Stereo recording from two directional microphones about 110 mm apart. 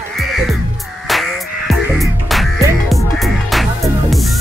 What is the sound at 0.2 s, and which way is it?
Music, centre (ahead or behind).